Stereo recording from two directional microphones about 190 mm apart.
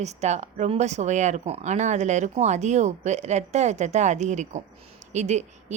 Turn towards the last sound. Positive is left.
turn(degrees=-40)  # may be behind; listen again after turning